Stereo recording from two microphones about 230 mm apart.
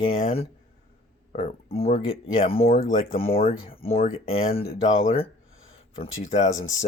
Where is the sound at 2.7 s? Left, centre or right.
Left.